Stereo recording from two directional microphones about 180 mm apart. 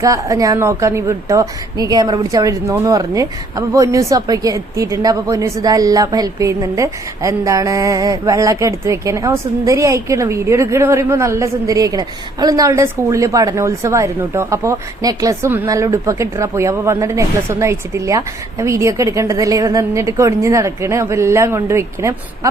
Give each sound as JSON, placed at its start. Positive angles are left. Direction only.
{"t": 0.0, "sound": "a woman's voice", "side_deg": -20}